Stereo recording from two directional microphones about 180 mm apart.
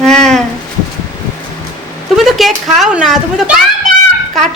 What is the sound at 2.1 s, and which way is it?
A man's voice, centre (ahead or behind).